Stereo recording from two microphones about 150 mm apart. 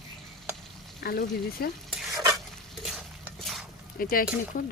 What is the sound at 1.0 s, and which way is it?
Speech, 90° left.